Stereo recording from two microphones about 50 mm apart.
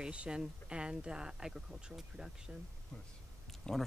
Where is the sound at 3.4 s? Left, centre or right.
Centre.